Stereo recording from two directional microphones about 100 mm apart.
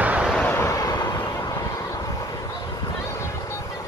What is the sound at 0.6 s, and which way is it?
Vehicle, 35° left (ahead or behind).